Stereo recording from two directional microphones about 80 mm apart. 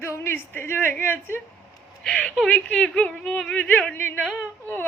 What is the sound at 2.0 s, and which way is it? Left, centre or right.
A woman's voice, centre.